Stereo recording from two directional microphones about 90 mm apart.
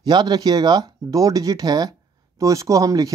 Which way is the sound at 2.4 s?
40° right (ahead or behind).